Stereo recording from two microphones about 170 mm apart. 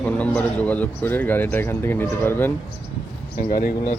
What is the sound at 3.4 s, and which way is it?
Speech, 55° left (ahead or behind).